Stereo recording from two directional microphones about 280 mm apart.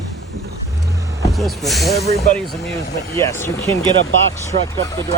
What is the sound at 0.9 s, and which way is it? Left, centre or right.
Vehicle, centre.